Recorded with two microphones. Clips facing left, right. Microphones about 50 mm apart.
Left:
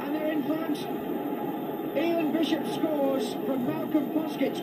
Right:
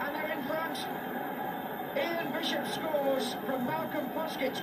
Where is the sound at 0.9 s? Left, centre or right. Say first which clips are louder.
Left 5 dB; right.